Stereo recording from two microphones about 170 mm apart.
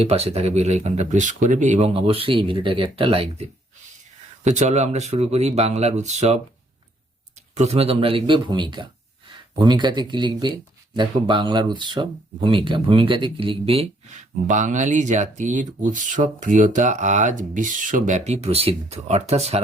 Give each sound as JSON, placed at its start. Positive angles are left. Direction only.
{"t": 0.0, "sound": "speech", "side_deg": -35}
{"t": 4.4, "sound": "speech", "side_deg": -45}